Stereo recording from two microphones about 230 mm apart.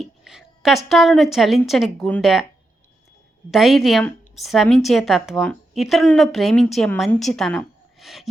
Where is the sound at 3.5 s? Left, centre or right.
Centre.